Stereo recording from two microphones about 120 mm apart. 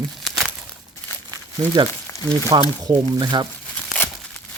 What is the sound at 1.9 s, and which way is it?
Speech, 20° left (ahead or behind).